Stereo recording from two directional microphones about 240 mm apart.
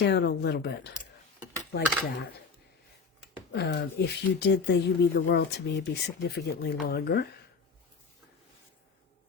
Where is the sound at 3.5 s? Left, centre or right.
Left.